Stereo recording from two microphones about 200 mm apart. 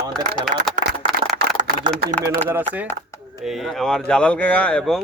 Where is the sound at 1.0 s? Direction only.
40° right (ahead or behind).